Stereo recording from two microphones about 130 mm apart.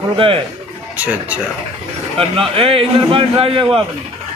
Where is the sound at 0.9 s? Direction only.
10° right (ahead or behind).